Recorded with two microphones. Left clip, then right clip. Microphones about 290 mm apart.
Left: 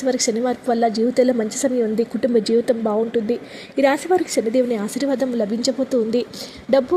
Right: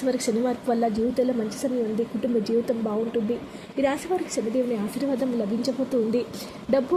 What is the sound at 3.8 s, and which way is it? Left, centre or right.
A woman's voice, left.